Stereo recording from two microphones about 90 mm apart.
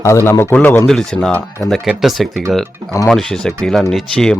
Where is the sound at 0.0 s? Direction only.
30° left (ahead or behind).